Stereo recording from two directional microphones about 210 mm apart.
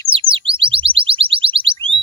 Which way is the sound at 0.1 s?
25° right (ahead or behind).